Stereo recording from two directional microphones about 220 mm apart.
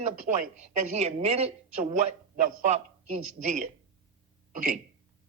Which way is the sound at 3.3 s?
30° right (ahead or behind).